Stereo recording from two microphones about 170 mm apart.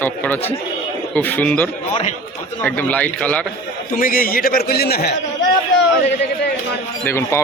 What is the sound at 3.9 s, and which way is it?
A man's voice, 55° left (ahead or behind).